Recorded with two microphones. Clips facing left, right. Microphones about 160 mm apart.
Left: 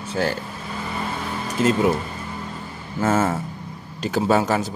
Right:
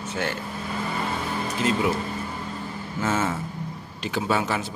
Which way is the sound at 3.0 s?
50° left (ahead or behind).